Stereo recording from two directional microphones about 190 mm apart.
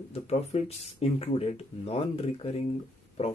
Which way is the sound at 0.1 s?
35° left (ahead or behind).